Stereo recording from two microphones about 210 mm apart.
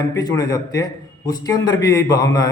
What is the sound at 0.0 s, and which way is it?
A man's voice, 15° left (ahead or behind).